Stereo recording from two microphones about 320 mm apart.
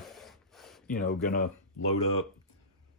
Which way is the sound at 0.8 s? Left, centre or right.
Left.